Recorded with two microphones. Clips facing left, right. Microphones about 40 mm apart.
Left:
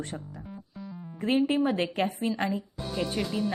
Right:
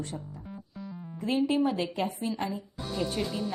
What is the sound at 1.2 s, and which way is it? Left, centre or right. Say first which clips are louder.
Speech: left 1 dB; left.